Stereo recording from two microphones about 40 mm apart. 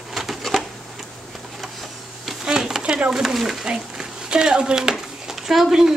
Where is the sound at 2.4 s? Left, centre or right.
Centre.